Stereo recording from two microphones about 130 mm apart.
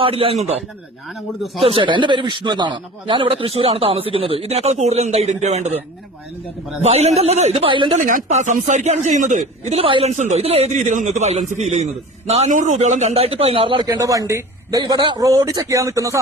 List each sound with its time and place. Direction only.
0.0 s a man's voice: 45° right (ahead or behind)
1.6 s a man's voice: 40° right (ahead or behind); by 5.7 s 60° right (ahead or behind)
6.8 s a man's voice: 55° right (ahead or behind)
8.0 s a man's voice: 75° right (ahead or behind)
9.8 s a man's voice: 45° right (ahead or behind)
10.1 s a man's voice: 65° right (ahead or behind); by 13.8 s 40° right (ahead or behind)
13.8 s a man's voice: 25° right (ahead or behind)